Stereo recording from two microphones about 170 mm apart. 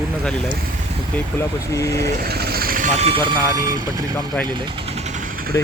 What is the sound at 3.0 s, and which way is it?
Speech, 35° right (ahead or behind).